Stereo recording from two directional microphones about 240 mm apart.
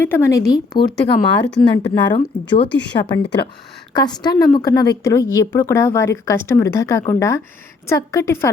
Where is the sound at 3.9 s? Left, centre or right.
Centre.